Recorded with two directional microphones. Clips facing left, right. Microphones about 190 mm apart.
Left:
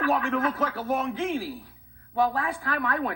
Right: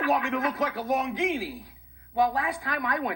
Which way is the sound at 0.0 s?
15° right (ahead or behind).